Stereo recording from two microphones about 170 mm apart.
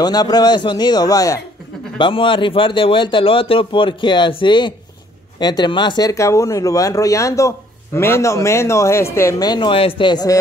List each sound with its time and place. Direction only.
0.0 s a man's voice: 25° left (ahead or behind)